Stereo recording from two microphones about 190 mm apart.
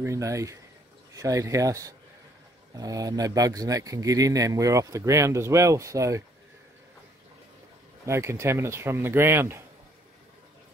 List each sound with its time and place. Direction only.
0.0 s speech: 15° right (ahead or behind)
8.0 s speech: 15° right (ahead or behind)